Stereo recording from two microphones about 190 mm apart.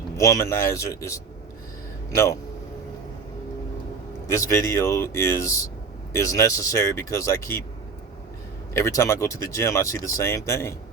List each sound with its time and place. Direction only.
0.2 s speech: 15° left (ahead or behind)
4.3 s speech: 15° left (ahead or behind)
8.7 s speech: 15° left (ahead or behind)